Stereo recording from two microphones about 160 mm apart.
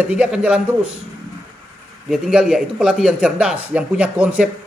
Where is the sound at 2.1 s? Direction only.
5° right (ahead or behind).